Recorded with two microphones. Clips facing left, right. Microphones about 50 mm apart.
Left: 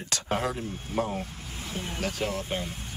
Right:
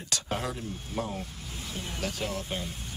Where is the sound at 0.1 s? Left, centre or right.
Left.